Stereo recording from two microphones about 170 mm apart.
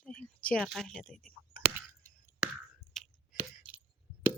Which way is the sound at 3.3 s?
10° right (ahead or behind).